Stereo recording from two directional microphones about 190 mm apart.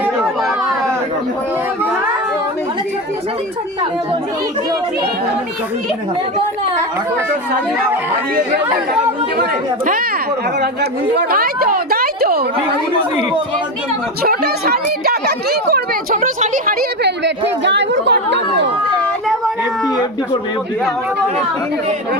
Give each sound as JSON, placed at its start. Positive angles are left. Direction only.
{"t": 9.4, "sound": "speech", "side_deg": -50}
{"t": 10.6, "sound": "a woman's voice", "side_deg": -60}
{"t": 14.2, "sound": "speech", "side_deg": -55}
{"t": 17.0, "sound": "speech", "side_deg": -65}